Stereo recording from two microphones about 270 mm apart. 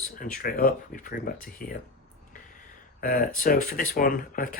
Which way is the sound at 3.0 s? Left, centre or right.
Left.